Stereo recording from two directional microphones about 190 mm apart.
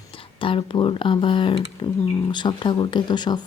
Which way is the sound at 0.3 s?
25° left (ahead or behind).